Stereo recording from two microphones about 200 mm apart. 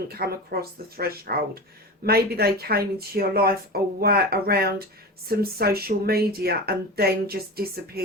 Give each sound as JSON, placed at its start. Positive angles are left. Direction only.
{"t": 0.1, "sound": "a woman's voice", "side_deg": -50}